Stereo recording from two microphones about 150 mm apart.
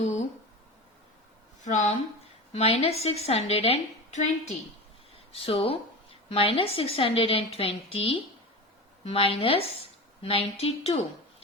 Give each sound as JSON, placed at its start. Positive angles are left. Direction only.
{"t": 1.6, "sound": "speech", "side_deg": 55}
{"t": 2.5, "sound": "a woman's voice", "side_deg": 45}